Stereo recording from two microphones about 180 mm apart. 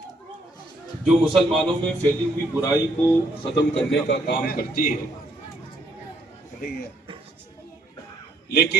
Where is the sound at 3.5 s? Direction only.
75° left (ahead or behind); by 4.9 s 55° left (ahead or behind).